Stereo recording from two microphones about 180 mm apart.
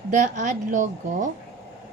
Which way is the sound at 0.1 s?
45° right (ahead or behind).